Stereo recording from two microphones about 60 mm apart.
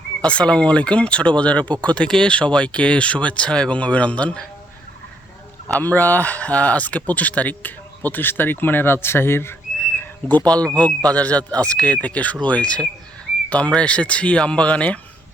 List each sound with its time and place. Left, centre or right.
0.2 s speech: centre
5.8 s speech: left
10.0 s a sound: left
10.8 s speech: centre